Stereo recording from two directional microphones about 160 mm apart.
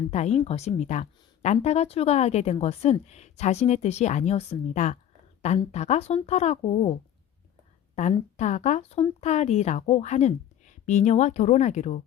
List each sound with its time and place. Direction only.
0.1 s speech: 45° left (ahead or behind)
8.0 s speech: 45° left (ahead or behind)